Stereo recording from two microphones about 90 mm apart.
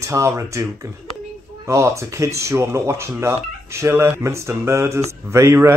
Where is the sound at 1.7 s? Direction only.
35° right (ahead or behind).